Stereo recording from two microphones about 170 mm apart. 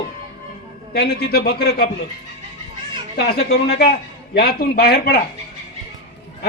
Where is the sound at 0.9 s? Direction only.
65° left (ahead or behind).